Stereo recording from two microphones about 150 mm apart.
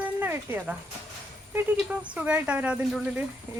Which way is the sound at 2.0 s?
10° right (ahead or behind).